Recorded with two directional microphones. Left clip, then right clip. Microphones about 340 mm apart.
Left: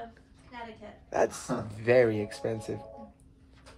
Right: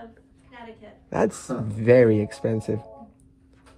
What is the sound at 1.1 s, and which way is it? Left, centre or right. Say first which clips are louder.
Speech: right 4 dB; centre.